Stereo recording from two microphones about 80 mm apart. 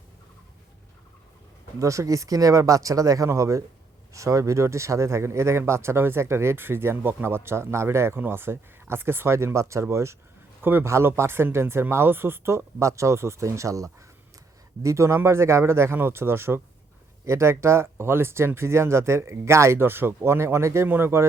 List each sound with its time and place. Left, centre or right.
1.8 s speech: right